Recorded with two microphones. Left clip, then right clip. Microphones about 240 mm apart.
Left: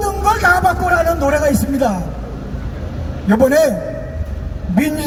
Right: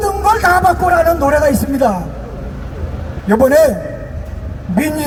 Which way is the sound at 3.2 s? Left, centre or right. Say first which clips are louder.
Right 3 dB; right.